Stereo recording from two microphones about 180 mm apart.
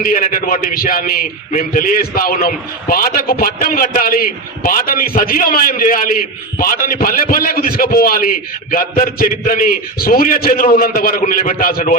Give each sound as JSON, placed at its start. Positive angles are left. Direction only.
{"t": 0.0, "sound": "a man's voice", "side_deg": 50}